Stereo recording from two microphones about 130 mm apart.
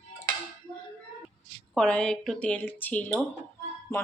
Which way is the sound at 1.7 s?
5° left (ahead or behind).